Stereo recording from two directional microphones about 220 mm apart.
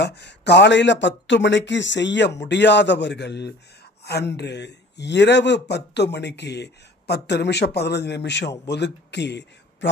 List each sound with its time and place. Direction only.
0.0 s speech: 50° left (ahead or behind)
4.0 s a sound: 45° left (ahead or behind)
4.4 s speech: 50° left (ahead or behind)